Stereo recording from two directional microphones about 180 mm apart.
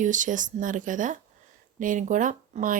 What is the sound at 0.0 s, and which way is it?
Speech, 45° right (ahead or behind).